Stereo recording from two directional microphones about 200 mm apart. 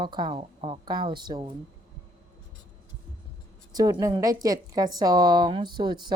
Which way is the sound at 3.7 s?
15° right (ahead or behind).